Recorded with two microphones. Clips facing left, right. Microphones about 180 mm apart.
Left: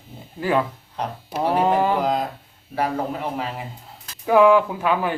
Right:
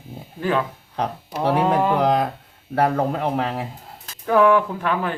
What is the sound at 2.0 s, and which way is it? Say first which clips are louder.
Speech: right 3 dB; 70° right (ahead or behind).